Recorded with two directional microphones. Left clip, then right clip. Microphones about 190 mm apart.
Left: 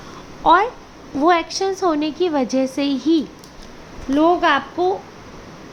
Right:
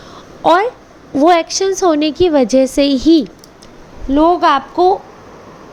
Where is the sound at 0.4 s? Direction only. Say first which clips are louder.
Right 3 dB; 25° right (ahead or behind).